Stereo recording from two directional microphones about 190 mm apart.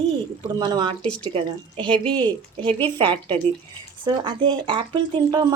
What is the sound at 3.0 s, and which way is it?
Speech, 30° right (ahead or behind).